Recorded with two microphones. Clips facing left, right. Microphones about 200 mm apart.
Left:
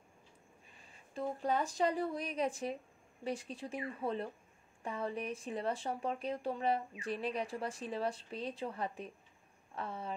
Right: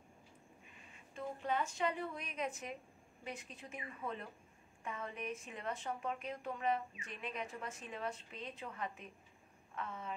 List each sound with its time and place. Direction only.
0.7 s a woman's voice: 35° left (ahead or behind)